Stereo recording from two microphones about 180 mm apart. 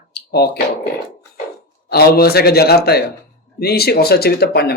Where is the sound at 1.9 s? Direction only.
60° left (ahead or behind).